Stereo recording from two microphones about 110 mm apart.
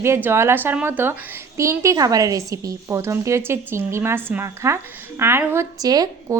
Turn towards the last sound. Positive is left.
turn(degrees=-35)  # may be behind; listen again after turning